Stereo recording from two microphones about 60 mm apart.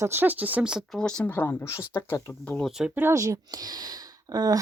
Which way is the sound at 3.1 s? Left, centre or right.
Right.